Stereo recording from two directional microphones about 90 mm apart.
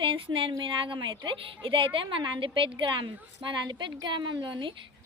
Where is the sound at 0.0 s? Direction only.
70° right (ahead or behind).